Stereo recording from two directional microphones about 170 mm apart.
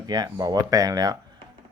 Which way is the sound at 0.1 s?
25° right (ahead or behind).